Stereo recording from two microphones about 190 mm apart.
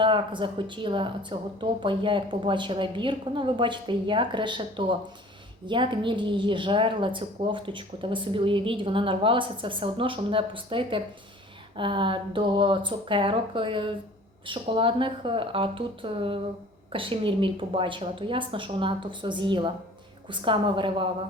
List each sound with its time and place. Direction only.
0.0 s a woman's voice: 25° right (ahead or behind)